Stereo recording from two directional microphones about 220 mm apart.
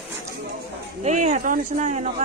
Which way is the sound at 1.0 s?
30° right (ahead or behind).